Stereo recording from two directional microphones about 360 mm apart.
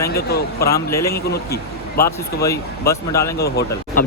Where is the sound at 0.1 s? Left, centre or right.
Left.